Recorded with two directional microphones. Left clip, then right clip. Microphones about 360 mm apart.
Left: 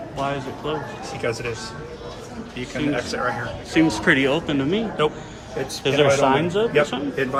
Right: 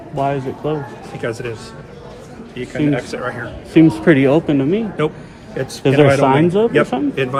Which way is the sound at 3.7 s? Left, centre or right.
Centre.